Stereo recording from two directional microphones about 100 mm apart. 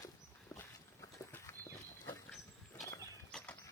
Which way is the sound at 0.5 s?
25° left (ahead or behind).